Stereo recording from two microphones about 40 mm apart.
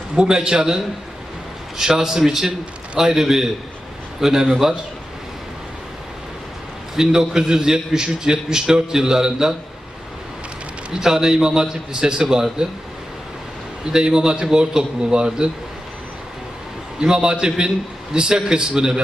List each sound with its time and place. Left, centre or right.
0.2 s a man's voice: right
6.9 s a man's voice: centre
11.0 s a man's voice: centre
13.9 s a man's voice: right
17.0 s a man's voice: centre